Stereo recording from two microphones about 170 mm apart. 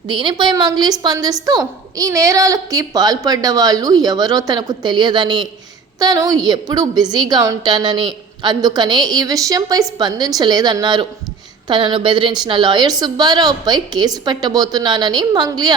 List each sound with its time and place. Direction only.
0.1 s a woman's voice: 30° right (ahead or behind)